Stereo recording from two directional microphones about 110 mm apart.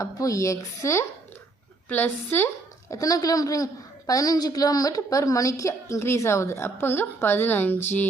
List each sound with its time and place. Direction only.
0.0 s a woman's voice: 30° left (ahead or behind)
2.9 s a woman's voice: 30° left (ahead or behind)